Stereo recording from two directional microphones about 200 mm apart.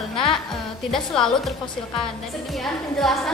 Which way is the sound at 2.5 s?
Centre (ahead or behind).